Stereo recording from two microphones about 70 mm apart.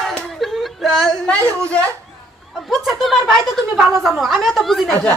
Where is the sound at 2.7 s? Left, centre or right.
Centre.